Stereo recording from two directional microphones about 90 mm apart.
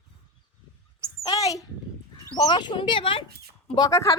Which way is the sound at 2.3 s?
55° left (ahead or behind).